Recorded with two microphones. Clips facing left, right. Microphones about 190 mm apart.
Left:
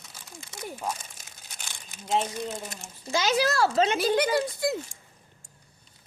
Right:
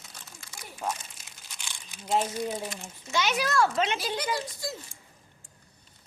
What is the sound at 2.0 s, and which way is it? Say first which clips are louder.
Speech: even; 5° right (ahead or behind).